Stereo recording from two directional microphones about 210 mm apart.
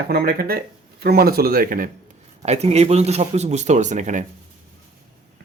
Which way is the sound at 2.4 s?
30° right (ahead or behind).